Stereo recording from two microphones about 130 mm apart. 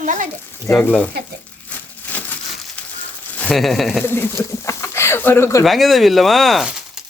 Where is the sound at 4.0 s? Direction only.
15° left (ahead or behind).